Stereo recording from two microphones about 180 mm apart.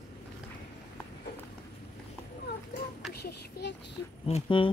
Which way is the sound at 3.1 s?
60° left (ahead or behind).